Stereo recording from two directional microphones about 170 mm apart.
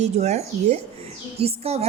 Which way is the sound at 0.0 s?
40° right (ahead or behind).